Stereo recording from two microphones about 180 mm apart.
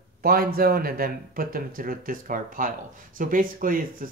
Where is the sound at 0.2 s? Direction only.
55° right (ahead or behind).